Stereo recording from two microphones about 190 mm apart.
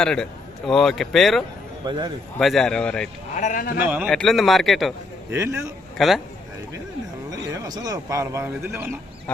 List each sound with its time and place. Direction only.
0.0 s a man's voice: 5° left (ahead or behind)
1.8 s a man's voice: 20° right (ahead or behind)
2.4 s a man's voice: centre (ahead or behind)
3.3 s a man's voice: 45° left (ahead or behind)
3.8 s a man's voice: 10° right (ahead or behind)
5.3 s speech: 15° right (ahead or behind)
6.0 s a man's voice: centre (ahead or behind)
7.3 s speech: 20° right (ahead or behind)